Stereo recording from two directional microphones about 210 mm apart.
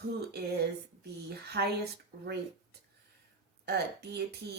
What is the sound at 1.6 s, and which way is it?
Speech, 55° right (ahead or behind).